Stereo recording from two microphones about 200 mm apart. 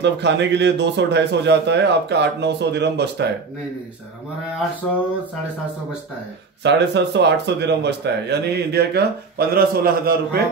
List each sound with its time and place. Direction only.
0.0 s speech: 60° right (ahead or behind)
6.6 s speech: 60° right (ahead or behind)